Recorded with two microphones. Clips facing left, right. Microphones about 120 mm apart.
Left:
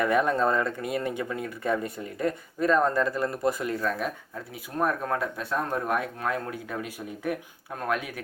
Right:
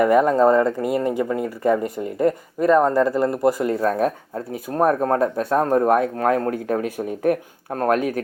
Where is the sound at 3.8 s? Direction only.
45° right (ahead or behind).